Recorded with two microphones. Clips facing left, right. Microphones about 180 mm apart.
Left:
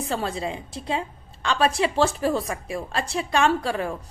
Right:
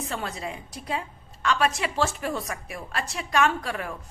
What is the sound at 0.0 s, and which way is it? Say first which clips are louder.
A woman's voice: left 5 dB; 30° left (ahead or behind).